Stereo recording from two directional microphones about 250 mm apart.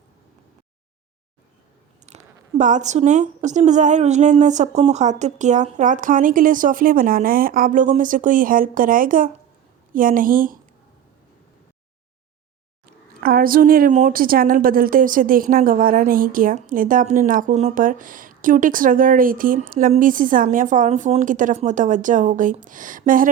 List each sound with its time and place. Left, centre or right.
2.1 s a sound: right
2.6 s speech: right
12.8 s speech: right